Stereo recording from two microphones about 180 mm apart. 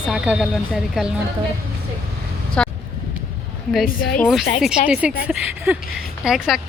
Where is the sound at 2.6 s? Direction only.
5° left (ahead or behind).